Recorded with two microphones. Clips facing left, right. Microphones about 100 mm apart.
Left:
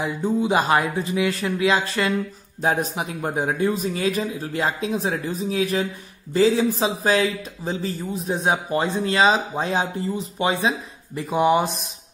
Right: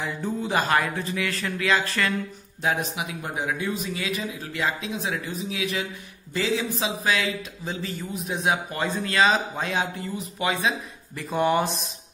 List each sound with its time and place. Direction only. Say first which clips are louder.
0.0 s speech: left 6 dB; 20° left (ahead or behind)
2.6 s speech: left 4 dB; 40° left (ahead or behind)
11.2 s speech: left 4 dB; 15° left (ahead or behind)